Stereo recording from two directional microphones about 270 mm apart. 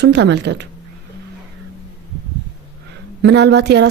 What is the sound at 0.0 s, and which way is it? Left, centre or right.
Speech, right.